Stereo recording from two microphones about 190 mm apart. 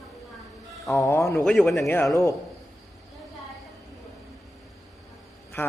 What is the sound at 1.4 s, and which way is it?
Speech, 5° left (ahead or behind).